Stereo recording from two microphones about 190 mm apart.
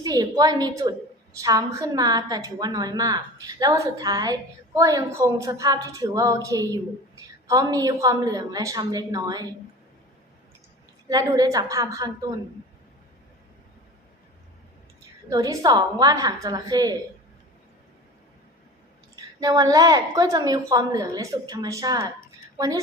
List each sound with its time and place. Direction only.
0.0 s a woman's voice: 20° right (ahead or behind)
11.1 s a woman's voice: 20° right (ahead or behind)
15.3 s a woman's voice: 20° right (ahead or behind)
19.1 s a woman's voice: 20° right (ahead or behind)